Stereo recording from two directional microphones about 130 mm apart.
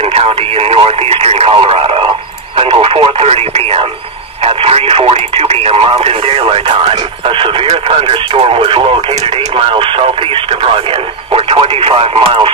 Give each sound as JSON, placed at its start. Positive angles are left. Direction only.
{"t": 0.1, "sound": "speech", "side_deg": -50}